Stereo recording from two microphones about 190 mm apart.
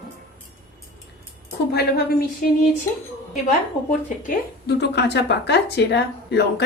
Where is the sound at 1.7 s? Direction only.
55° left (ahead or behind).